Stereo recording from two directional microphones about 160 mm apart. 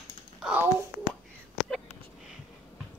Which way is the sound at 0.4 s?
5° right (ahead or behind).